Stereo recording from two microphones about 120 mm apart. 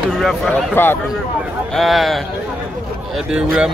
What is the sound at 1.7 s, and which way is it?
Speech, centre (ahead or behind).